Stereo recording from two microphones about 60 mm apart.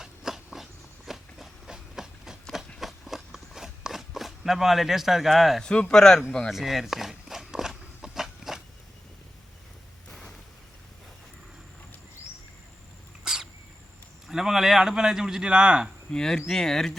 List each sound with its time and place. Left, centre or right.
0.0 s dog: centre
2.7 s walk: centre
5.6 s speech: centre
6.5 s walk: centre
13.2 s cat: centre
14.3 s a man's voice: centre
16.1 s speech: centre